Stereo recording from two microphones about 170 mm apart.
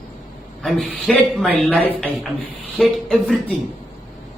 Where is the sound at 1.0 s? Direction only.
5° left (ahead or behind).